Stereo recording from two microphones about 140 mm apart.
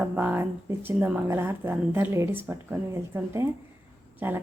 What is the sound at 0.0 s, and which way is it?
Speech, 10° right (ahead or behind).